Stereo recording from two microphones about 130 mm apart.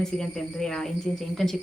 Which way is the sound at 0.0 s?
5° left (ahead or behind).